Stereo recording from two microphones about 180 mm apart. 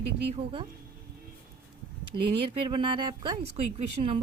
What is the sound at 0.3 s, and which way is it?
Speech, 30° right (ahead or behind).